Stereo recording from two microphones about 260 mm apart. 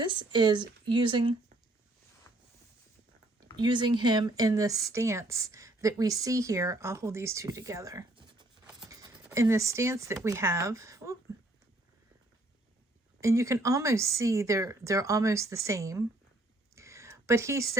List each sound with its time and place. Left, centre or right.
0.0 s speech: centre
3.6 s speech: centre
13.2 s speech: centre
16.7 s a sound: centre